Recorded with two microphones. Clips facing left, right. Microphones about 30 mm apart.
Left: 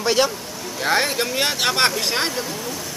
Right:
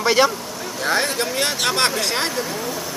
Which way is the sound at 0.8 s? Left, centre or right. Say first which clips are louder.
Left 1 dB; centre.